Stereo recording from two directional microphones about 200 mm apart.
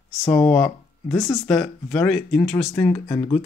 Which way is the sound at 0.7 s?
15° left (ahead or behind).